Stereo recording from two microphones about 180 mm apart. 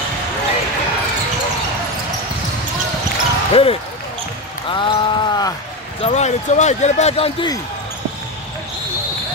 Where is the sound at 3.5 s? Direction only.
30° left (ahead or behind).